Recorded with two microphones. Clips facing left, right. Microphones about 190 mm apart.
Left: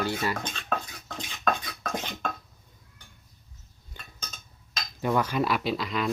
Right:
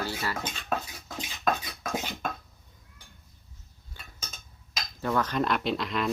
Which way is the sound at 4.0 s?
20° left (ahead or behind).